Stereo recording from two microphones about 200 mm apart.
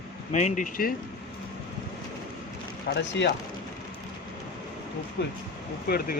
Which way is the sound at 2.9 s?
65° left (ahead or behind).